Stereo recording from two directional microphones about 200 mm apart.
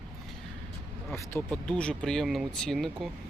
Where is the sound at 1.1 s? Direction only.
15° left (ahead or behind).